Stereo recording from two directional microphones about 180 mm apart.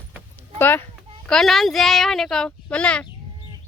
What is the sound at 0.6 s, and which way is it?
A child's voice, 10° left (ahead or behind).